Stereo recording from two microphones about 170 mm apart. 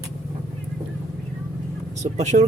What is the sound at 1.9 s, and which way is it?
Vehicle, 45° right (ahead or behind).